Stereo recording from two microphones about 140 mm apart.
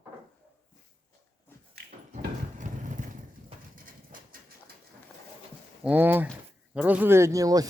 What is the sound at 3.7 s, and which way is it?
Bird, 80° right.